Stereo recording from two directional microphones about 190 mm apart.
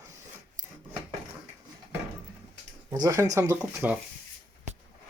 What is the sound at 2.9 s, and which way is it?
Speech, 20° right (ahead or behind).